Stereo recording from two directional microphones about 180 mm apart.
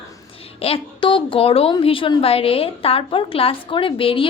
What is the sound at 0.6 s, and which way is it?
A woman's voice, 30° left (ahead or behind).